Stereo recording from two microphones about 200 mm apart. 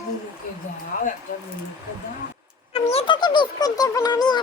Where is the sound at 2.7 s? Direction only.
30° left (ahead or behind).